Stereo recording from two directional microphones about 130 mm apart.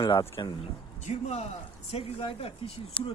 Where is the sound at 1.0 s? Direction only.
55° left (ahead or behind).